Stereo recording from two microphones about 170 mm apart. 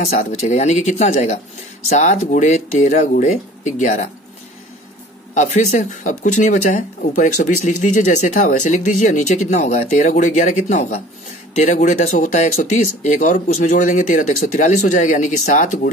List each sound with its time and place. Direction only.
0.0 s speech: 45° left (ahead or behind)
5.3 s speech: 45° left (ahead or behind)